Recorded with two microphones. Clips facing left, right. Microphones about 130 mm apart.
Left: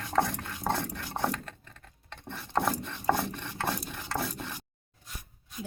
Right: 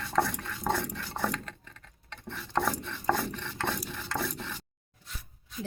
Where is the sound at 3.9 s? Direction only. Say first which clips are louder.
Even; 15° left (ahead or behind).